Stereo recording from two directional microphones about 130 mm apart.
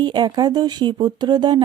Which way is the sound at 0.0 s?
35° right (ahead or behind).